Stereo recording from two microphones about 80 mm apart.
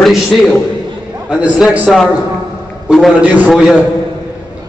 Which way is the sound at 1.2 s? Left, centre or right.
Centre.